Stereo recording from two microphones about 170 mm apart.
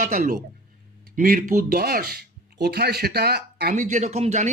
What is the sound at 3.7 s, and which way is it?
Speech, 45° right (ahead or behind).